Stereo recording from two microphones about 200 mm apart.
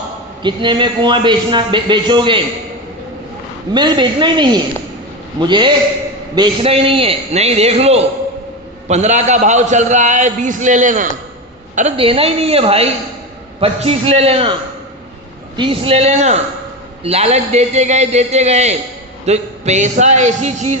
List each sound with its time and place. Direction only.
0.4 s a man's voice: 25° right (ahead or behind)
3.7 s a man's voice: 20° right (ahead or behind)
15.5 s a man's voice: 25° right (ahead or behind)